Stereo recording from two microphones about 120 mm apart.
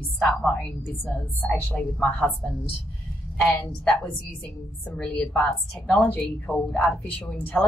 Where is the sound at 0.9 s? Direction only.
15° left (ahead or behind).